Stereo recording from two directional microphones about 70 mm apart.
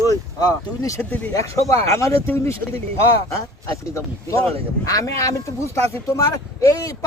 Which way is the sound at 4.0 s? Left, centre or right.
Left.